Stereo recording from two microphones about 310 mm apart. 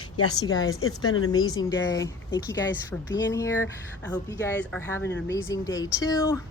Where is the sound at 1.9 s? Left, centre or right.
Centre.